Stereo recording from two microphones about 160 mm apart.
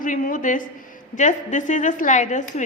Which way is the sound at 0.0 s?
55° left (ahead or behind).